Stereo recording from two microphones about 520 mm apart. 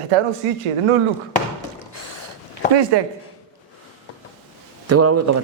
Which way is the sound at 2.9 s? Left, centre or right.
Right.